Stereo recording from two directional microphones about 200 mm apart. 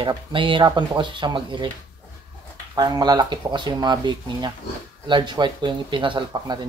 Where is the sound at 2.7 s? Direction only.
20° right (ahead or behind).